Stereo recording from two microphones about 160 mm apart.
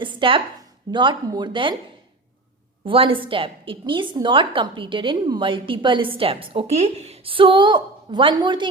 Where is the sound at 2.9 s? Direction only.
35° right (ahead or behind).